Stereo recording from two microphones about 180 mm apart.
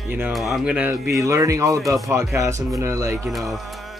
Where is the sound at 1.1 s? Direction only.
15° right (ahead or behind).